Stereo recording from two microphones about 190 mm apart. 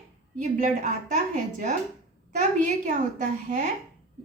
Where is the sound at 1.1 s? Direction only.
40° right (ahead or behind).